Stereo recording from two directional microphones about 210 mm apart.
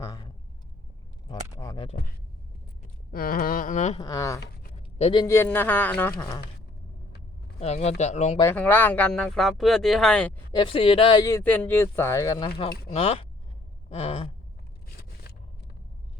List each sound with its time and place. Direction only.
0.0 s vehicle: 20° left (ahead or behind)
1.3 s a sound: 20° left (ahead or behind)
2.8 s a sound: 45° left (ahead or behind)
4.0 s speech: 15° left (ahead or behind)
4.9 s a man's voice: 30° left (ahead or behind)
5.2 s speech: 10° left (ahead or behind)
7.6 s speech: 30° left (ahead or behind)
8.4 s speech: 10° left (ahead or behind)
10.5 s speech: 25° left (ahead or behind)
12.9 s speech: 25° left (ahead or behind)